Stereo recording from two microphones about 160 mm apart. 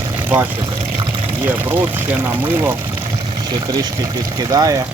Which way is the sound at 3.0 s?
25° right (ahead or behind).